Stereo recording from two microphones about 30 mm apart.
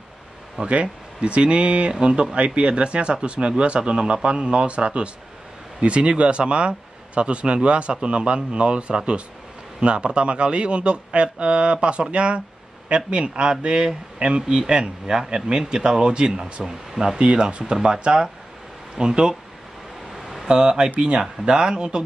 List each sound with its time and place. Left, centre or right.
0.7 s speech: right
20.2 s a sound: centre
20.4 s speech: right